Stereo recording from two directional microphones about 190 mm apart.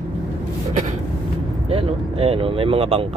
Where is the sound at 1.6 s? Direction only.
30° right (ahead or behind).